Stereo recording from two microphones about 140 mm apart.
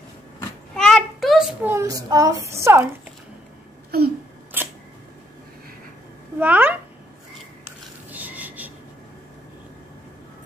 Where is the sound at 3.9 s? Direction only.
90° right.